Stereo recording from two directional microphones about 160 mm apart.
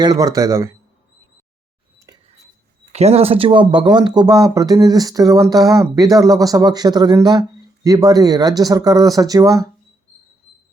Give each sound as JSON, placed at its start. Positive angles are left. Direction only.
{"t": 0.0, "sound": "speech", "side_deg": -25}
{"t": 2.1, "sound": "a sound", "side_deg": -20}
{"t": 2.9, "sound": "speech", "side_deg": -40}